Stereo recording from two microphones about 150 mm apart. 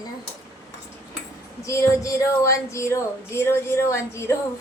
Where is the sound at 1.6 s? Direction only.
20° left (ahead or behind).